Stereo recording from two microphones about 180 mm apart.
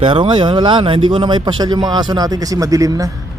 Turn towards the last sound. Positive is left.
turn(degrees=-20)  # may be behind; listen again after turning